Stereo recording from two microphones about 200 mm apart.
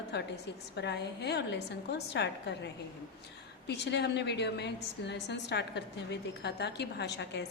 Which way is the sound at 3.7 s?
60° left (ahead or behind).